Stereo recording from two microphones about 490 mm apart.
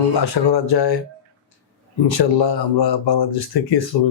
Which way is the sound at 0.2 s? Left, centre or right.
Left.